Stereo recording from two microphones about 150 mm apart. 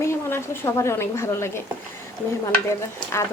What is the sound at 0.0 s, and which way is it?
A woman's voice, 15° left (ahead or behind).